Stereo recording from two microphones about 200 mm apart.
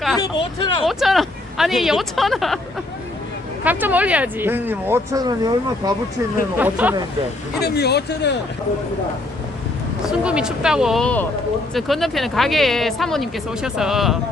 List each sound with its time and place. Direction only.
0.2 s speech: 25° left (ahead or behind)
0.9 s speech: centre (ahead or behind)
3.6 s speech: 10° right (ahead or behind)
6.6 s speech: 10° right (ahead or behind)
7.6 s speech: 55° left (ahead or behind)
10.1 s speech: 5° right (ahead or behind)